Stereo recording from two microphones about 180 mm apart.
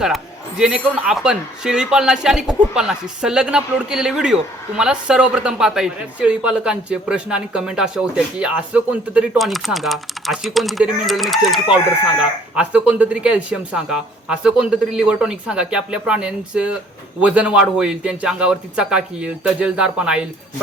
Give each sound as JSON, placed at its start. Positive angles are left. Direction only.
{"t": 0.0, "sound": "speech", "side_deg": -5}